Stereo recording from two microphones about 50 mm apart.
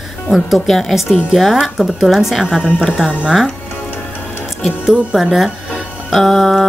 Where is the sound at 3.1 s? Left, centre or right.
Right.